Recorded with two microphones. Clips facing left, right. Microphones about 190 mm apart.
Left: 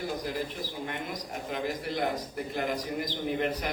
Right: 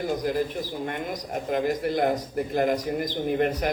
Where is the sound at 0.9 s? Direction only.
45° right (ahead or behind).